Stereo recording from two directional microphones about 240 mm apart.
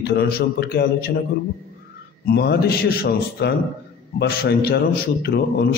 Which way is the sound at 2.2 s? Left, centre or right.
Left.